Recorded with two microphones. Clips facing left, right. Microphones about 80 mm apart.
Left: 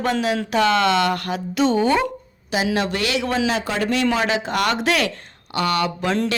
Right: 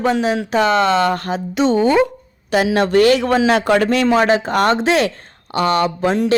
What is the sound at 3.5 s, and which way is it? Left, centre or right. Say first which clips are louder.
Speech: right 9 dB; right.